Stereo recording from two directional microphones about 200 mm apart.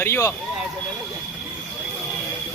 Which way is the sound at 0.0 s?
15° left (ahead or behind).